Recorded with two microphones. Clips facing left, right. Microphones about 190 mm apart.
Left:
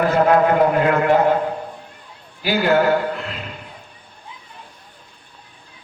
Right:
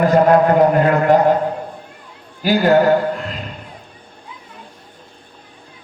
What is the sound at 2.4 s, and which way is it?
Speech, 45° right (ahead or behind).